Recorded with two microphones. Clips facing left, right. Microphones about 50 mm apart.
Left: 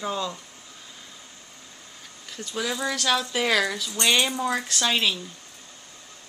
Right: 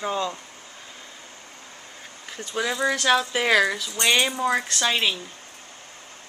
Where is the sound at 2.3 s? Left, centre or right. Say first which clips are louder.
Right 2 dB; right.